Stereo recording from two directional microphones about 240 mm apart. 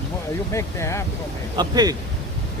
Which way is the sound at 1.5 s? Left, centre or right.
Centre.